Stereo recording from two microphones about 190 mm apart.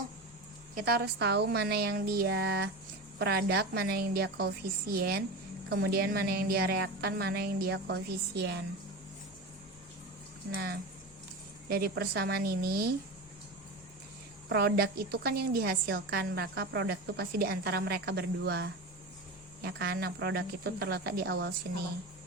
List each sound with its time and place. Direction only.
0.8 s a woman's voice: 55° right (ahead or behind)
10.5 s a woman's voice: 55° right (ahead or behind)
14.5 s a woman's voice: 55° right (ahead or behind)